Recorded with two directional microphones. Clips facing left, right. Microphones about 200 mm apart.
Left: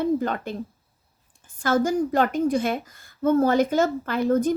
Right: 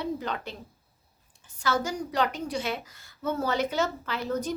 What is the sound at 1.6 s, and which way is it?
A woman's voice, 50° left (ahead or behind).